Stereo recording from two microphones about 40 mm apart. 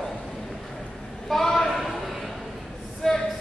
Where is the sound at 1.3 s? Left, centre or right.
Centre.